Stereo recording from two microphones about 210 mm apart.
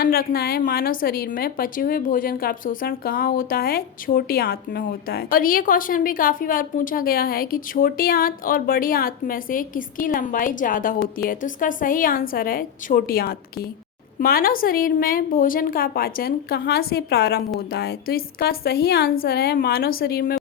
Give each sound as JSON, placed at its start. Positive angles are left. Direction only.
{"t": 0.0, "sound": "a woman's voice", "side_deg": 45}